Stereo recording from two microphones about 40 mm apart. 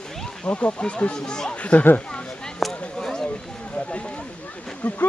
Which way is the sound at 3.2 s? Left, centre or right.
Left.